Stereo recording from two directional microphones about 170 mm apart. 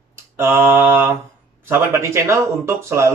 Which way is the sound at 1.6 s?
15° right (ahead or behind).